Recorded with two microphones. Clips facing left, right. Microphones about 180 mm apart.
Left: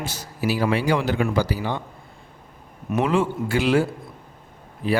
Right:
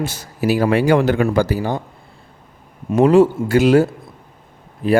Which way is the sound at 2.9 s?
45° right (ahead or behind).